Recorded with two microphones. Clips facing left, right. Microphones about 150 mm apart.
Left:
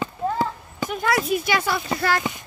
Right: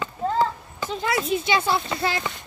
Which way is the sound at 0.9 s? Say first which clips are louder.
Left 2 dB; 25° right (ahead or behind).